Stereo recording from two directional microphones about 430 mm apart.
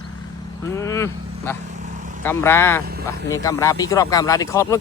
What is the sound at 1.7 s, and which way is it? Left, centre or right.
Vehicle, centre.